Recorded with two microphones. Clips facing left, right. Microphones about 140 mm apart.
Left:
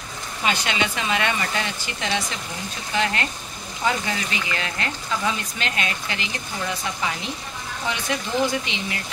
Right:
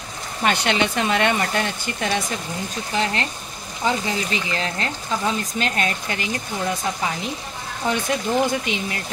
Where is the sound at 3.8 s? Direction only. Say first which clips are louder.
Right 2 dB; 30° right (ahead or behind).